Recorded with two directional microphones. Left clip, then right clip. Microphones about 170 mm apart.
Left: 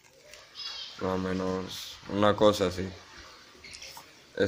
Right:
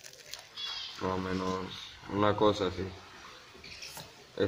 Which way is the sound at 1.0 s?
20° left (ahead or behind).